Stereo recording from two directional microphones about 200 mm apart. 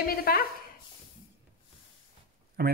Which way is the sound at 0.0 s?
50° left (ahead or behind).